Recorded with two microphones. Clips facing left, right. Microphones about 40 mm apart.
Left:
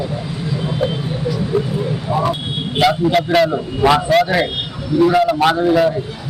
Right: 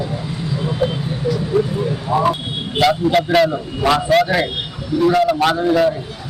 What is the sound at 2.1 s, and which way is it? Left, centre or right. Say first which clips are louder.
A man's voice: right 3 dB; centre.